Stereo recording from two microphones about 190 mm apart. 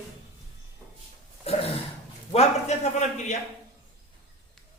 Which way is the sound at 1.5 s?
30° left (ahead or behind).